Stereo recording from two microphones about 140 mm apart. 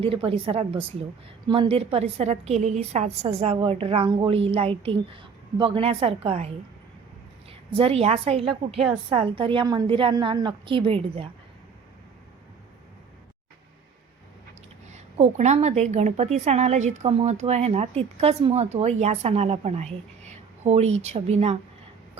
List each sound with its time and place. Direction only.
0.0 s a woman's voice: 40° right (ahead or behind)
7.7 s a woman's voice: 40° right (ahead or behind)
14.8 s a woman's voice: 55° right (ahead or behind)